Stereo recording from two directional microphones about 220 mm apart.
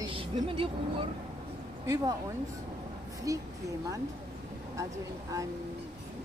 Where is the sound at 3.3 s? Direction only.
15° right (ahead or behind).